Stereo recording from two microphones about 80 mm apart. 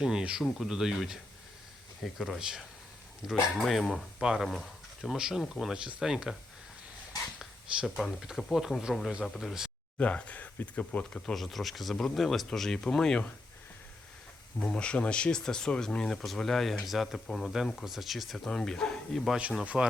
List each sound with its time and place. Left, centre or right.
0.0 s speech: centre
7.3 s a sound: centre
8.4 s speech: centre
10.0 s speech: centre
11.1 s speech: centre
14.6 s speech: centre
19.6 s speech: centre